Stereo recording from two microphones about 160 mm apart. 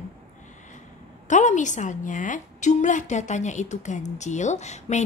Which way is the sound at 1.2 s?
50° left (ahead or behind).